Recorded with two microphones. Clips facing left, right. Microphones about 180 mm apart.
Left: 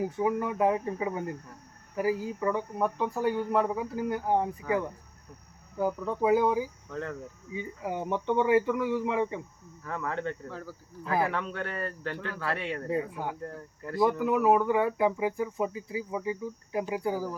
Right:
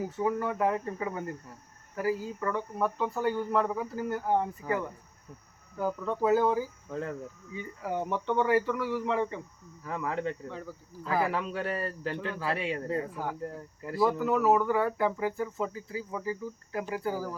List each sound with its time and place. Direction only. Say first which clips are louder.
0.0 s speech: left 2 dB; 15° left (ahead or behind)
5.7 s speech: left 2 dB; 15° left (ahead or behind)
9.8 s speech: right 1 dB; 10° right (ahead or behind)
11.0 s speech: left 1 dB; 20° left (ahead or behind)
11.6 s speech: right 2 dB; 10° right (ahead or behind)
12.1 s speech: right 1 dB; 25° right (ahead or behind)
12.9 s speech: left 1 dB; 15° left (ahead or behind)
13.4 s speech: right 1 dB; 10° right (ahead or behind)
14.0 s speech: left 1 dB; 15° left (ahead or behind)